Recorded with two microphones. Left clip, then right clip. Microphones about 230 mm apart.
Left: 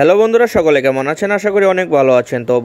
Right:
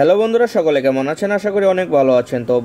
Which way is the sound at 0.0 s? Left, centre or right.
Left.